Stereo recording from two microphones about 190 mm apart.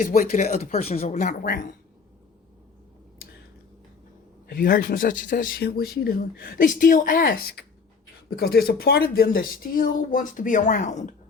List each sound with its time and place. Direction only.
0.0 s speech: 45° left (ahead or behind)
4.4 s speech: 50° left (ahead or behind)